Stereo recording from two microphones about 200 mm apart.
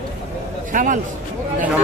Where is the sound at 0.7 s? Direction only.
40° right (ahead or behind).